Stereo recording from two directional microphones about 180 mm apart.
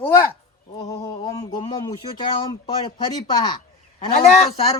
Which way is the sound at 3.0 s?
25° left (ahead or behind).